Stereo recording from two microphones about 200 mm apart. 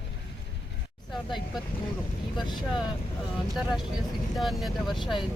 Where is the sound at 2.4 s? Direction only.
Centre (ahead or behind).